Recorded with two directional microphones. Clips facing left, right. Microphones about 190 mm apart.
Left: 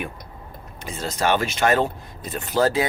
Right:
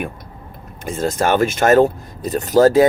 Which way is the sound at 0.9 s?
50° right (ahead or behind).